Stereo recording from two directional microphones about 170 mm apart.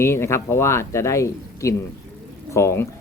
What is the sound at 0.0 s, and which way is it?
Speech, 15° left (ahead or behind).